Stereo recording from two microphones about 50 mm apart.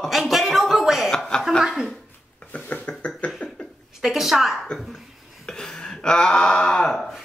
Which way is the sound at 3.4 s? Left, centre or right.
Left.